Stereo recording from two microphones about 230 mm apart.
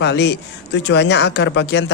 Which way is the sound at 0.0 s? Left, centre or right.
Left.